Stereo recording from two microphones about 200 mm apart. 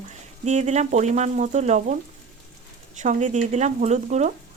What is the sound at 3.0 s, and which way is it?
Speech, 35° right (ahead or behind).